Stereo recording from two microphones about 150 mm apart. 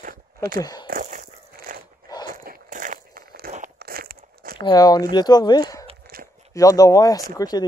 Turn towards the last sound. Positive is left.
turn(degrees=25)  # may be behind; listen again after turning